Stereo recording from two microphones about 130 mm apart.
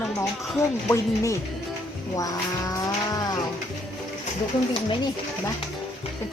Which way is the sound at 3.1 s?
30° left (ahead or behind).